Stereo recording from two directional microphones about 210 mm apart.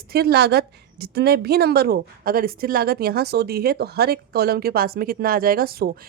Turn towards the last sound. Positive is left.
turn(degrees=-45)  # may be behind; listen again after turning